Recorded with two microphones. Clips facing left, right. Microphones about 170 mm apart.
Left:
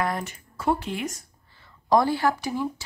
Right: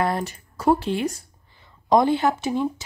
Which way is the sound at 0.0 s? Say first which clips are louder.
Right 4 dB; 35° right (ahead or behind).